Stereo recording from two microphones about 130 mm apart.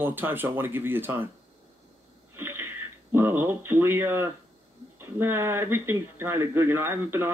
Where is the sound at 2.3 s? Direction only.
15° right (ahead or behind).